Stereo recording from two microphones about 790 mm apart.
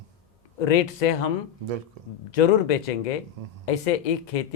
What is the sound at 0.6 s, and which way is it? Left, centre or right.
Speech, left.